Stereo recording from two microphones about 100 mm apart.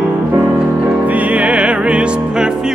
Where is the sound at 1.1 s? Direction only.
15° right (ahead or behind).